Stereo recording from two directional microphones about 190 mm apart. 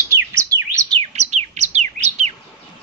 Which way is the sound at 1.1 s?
35° right (ahead or behind).